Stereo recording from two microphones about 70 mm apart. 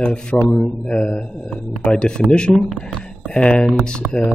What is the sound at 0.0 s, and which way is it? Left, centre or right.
Speech, centre.